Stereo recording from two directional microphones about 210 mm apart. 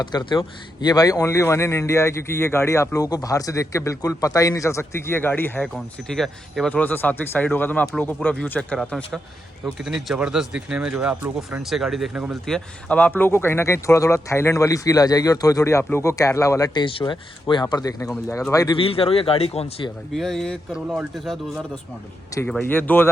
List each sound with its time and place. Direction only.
0.0 s speech: 20° left (ahead or behind)
20.1 s speech: centre (ahead or behind)
22.4 s speech: 5° left (ahead or behind)